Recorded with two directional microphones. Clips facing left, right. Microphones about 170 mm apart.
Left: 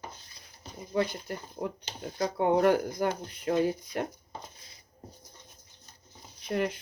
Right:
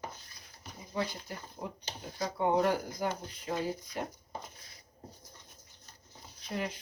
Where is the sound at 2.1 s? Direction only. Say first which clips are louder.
Left 3 dB; 60° left (ahead or behind).